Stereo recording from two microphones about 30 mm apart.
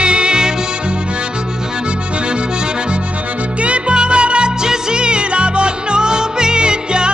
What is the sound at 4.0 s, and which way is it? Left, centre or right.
Music, right.